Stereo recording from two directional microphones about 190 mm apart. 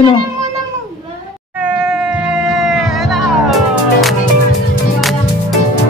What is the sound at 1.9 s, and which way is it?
Music, 5° right (ahead or behind).